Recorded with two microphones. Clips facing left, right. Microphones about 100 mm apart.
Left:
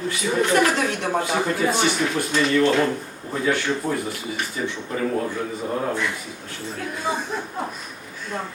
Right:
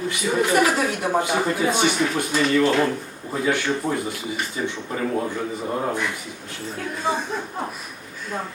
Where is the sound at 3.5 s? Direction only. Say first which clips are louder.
Even; 20° right (ahead or behind).